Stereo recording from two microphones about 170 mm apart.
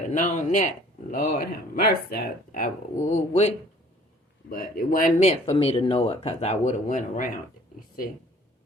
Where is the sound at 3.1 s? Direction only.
40° left (ahead or behind).